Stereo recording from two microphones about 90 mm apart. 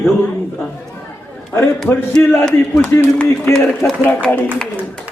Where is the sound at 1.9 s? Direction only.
20° left (ahead or behind).